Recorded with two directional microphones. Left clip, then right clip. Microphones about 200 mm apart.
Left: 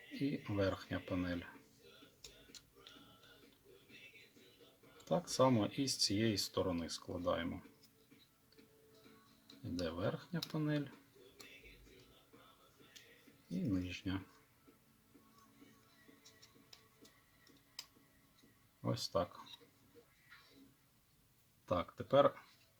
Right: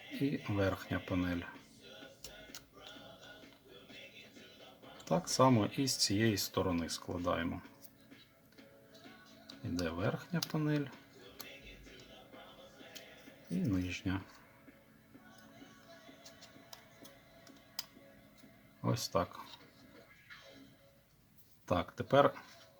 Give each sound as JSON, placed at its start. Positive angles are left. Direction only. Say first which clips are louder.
{"t": 0.2, "sound": "speech", "louder": "right 3 dB", "side_deg": -5}
{"t": 5.0, "sound": "speech", "louder": "right 4 dB", "side_deg": -5}
{"t": 9.8, "sound": "speech", "louder": "right 3 dB", "side_deg": -5}
{"t": 13.6, "sound": "speech", "louder": "right 4 dB", "side_deg": -5}
{"t": 18.8, "sound": "speech", "louder": "right 3 dB", "side_deg": -5}
{"t": 21.7, "sound": "speech", "louder": "right 3 dB", "side_deg": -15}